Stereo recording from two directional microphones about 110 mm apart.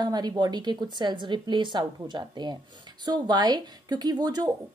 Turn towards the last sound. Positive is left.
turn(degrees=-35)  # may be behind; listen again after turning